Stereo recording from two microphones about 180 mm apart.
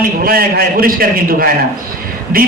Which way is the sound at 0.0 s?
55° right (ahead or behind).